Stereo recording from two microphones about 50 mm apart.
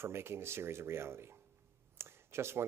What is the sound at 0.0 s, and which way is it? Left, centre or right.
Speech, right.